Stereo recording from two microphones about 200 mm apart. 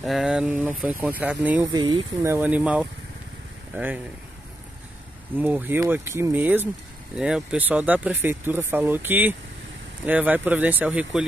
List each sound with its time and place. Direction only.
0.0 s speech: centre (ahead or behind)
1.7 s speech: 20° right (ahead or behind)
5.4 s speech: 10° right (ahead or behind)